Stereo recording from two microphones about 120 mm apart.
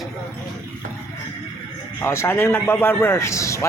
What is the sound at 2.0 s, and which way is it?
A man's voice, 20° left (ahead or behind).